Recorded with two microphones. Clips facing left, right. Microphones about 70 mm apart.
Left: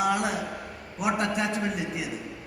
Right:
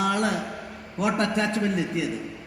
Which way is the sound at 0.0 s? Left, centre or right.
Centre.